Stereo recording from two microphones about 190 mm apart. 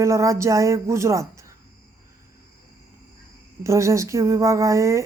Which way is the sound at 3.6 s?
15° right (ahead or behind).